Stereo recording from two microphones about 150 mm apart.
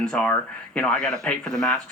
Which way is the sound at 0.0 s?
5° left (ahead or behind).